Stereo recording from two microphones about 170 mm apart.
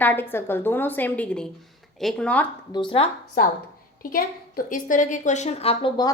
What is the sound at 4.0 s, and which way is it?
A woman's voice, 60° left (ahead or behind).